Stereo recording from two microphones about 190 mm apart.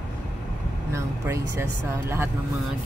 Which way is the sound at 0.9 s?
15° right (ahead or behind).